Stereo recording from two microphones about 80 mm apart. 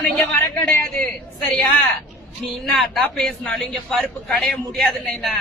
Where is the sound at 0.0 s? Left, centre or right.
Left.